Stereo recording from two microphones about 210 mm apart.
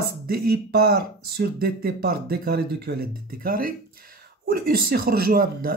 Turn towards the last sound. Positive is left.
turn(degrees=-45)  # may be behind; listen again after turning